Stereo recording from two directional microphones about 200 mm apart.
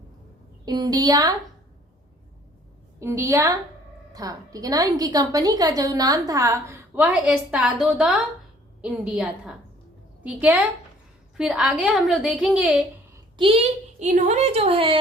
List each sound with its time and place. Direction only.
0.6 s a woman's voice: 20° right (ahead or behind)
3.0 s a woman's voice: 15° right (ahead or behind)
13.3 s a woman's voice: 25° right (ahead or behind)